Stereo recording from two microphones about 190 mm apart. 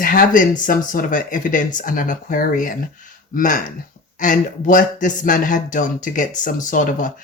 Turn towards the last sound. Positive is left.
turn(degrees=40)  # may be behind; listen again after turning